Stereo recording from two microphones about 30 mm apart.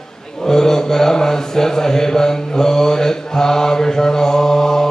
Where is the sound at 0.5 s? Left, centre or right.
Centre.